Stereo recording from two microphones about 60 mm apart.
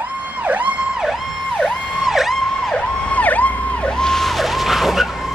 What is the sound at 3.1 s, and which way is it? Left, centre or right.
Emergency vehicle, left.